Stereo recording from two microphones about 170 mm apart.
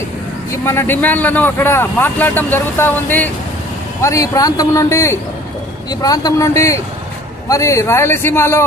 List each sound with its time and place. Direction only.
0.5 s a man's voice: 15° left (ahead or behind)